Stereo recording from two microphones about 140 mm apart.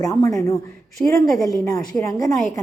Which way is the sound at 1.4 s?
25° left (ahead or behind).